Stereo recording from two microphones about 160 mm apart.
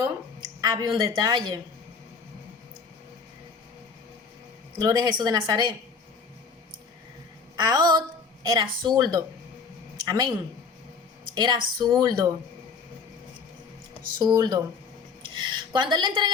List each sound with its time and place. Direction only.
0.6 s speech: 25° right (ahead or behind)
4.8 s speech: 25° right (ahead or behind)
7.5 s speech: 25° right (ahead or behind)
14.2 s speech: 25° right (ahead or behind)